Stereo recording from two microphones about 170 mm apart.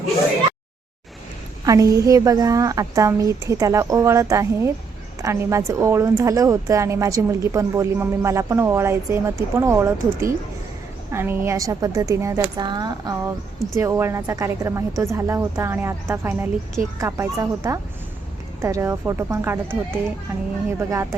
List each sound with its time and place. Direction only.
1.6 s a woman's voice: 20° right (ahead or behind)
20.7 s a woman's voice: 15° right (ahead or behind)